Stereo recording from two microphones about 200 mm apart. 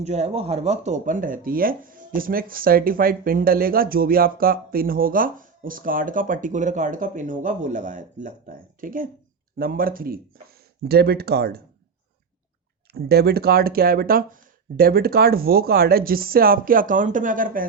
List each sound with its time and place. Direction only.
0.0 s speech: 35° right (ahead or behind); by 11.6 s 50° right (ahead or behind)
12.9 s speech: 50° right (ahead or behind)